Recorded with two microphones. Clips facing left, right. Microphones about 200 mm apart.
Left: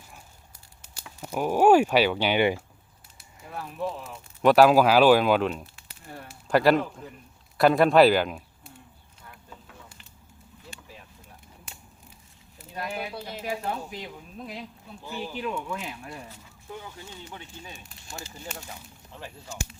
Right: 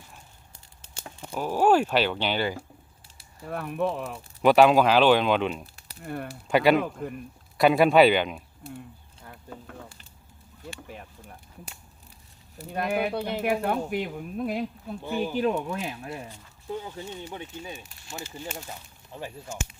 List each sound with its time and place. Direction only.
1.2 s speech: 10° left (ahead or behind)
3.5 s speech: 60° right (ahead or behind)
4.4 s speech: centre (ahead or behind)
6.0 s speech: 60° right (ahead or behind)
6.5 s speech: centre (ahead or behind)
6.7 s speech: 60° right (ahead or behind)
7.6 s speech: centre (ahead or behind)
9.5 s a sound: 55° right (ahead or behind)
12.7 s speech: 55° right (ahead or behind); by 15.9 s 40° right (ahead or behind)
17.2 s speech: 20° right (ahead or behind)